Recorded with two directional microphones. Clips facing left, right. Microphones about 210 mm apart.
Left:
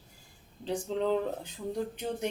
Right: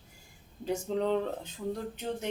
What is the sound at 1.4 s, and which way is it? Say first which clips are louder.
Speech: left 1 dB; 15° left (ahead or behind).